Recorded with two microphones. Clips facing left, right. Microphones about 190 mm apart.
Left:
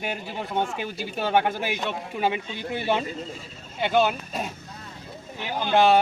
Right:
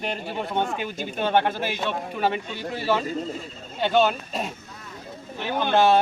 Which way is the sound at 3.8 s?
5° left (ahead or behind).